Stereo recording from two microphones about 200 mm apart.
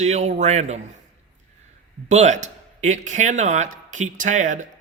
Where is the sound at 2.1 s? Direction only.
35° right (ahead or behind).